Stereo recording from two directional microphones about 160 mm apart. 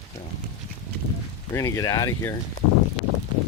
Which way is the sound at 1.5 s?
20° left (ahead or behind).